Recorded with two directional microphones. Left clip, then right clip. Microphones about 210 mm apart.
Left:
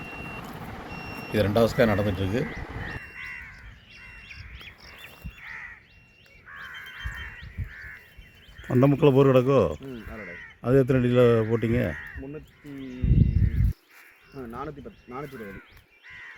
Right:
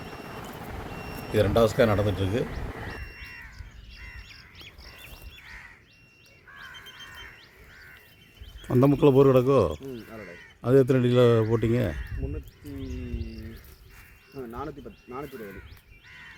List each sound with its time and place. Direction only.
1.3 s speech: centre (ahead or behind)
8.6 s speech: 5° left (ahead or behind)
14.3 s a sound: 30° left (ahead or behind)